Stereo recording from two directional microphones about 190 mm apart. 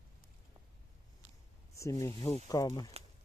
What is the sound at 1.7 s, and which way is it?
Speech, 15° left (ahead or behind).